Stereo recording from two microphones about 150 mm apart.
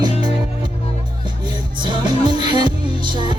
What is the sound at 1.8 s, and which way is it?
Music, 30° right (ahead or behind).